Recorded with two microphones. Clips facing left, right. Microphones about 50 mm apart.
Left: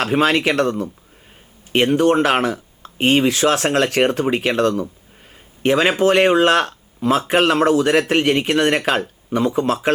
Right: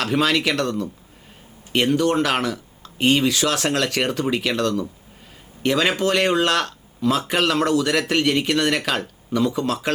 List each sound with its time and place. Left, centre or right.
0.0 s speech: left